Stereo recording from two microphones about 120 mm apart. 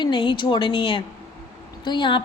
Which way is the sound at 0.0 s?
45° left (ahead or behind).